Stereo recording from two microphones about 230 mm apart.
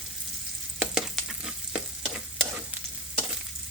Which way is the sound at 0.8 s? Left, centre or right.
Centre.